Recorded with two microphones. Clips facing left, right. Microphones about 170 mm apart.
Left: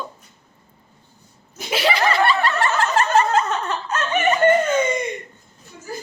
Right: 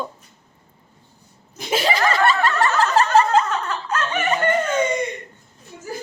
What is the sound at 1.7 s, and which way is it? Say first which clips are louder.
Snicker: even; 45° right (ahead or behind).